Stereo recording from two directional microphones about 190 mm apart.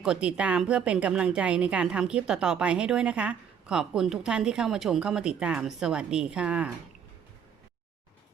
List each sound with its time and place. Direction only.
0.0 s speech: 5° right (ahead or behind)